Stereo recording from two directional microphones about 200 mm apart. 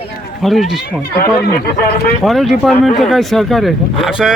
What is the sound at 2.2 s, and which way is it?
Speech, centre (ahead or behind).